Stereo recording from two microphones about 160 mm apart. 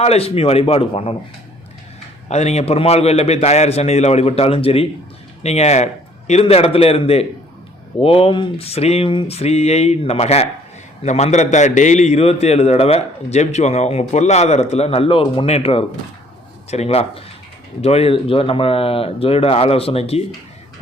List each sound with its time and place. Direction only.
0.0 s a man's voice: 40° left (ahead or behind)
2.3 s a man's voice: 45° left (ahead or behind)